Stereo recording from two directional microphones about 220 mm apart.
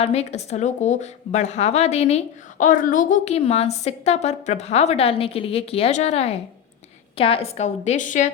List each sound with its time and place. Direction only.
0.0 s a woman's voice: 30° left (ahead or behind)